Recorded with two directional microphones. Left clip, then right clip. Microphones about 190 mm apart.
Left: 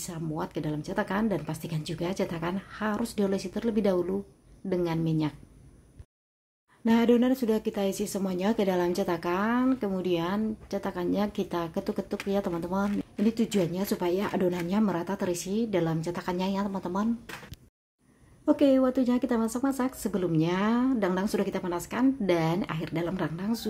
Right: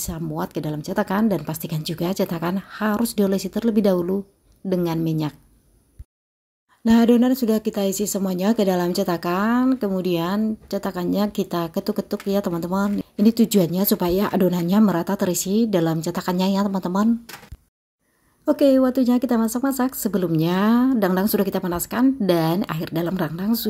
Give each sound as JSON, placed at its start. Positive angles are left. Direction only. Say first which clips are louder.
{"t": 0.0, "sound": "speech", "louder": "right 6 dB", "side_deg": -35}
{"t": 6.8, "sound": "speech", "louder": "right 6 dB", "side_deg": -30}
{"t": 18.4, "sound": "speech", "louder": "right 6 dB", "side_deg": -30}